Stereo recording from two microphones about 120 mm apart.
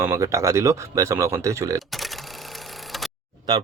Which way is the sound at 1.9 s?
Centre (ahead or behind).